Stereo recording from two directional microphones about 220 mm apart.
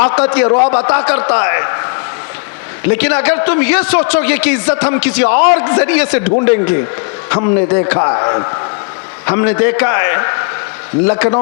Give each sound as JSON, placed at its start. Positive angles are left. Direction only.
{"t": 0.0, "sound": "a man's voice", "side_deg": 15}
{"t": 2.9, "sound": "a man's voice", "side_deg": 10}